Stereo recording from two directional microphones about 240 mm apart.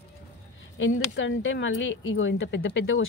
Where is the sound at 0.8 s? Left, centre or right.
Left.